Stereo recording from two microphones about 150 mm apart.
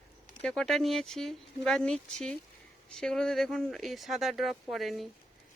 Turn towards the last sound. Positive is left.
turn(degrees=0)  # may be behind; listen again after turning